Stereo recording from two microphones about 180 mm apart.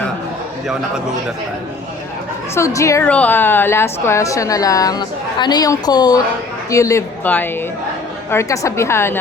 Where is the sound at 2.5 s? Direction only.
15° left (ahead or behind).